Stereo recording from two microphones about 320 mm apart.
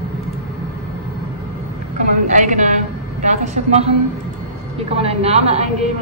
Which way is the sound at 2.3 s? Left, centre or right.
Right.